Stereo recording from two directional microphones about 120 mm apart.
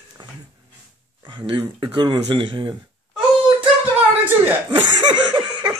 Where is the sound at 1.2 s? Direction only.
40° right (ahead or behind).